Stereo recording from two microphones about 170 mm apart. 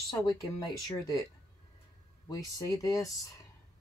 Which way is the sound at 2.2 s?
20° left (ahead or behind).